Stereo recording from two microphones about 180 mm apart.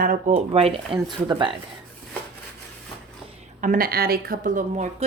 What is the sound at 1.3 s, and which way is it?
Speech, 25° right (ahead or behind).